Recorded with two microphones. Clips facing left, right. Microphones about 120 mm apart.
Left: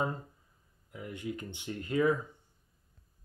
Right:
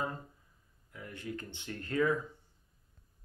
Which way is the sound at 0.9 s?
15° left (ahead or behind).